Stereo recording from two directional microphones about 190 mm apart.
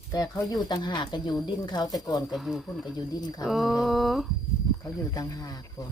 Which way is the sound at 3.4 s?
Centre (ahead or behind).